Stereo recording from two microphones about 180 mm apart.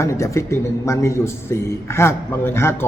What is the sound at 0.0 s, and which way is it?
A man's voice, 15° left (ahead or behind).